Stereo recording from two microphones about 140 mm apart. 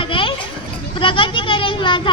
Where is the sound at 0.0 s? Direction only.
40° left (ahead or behind).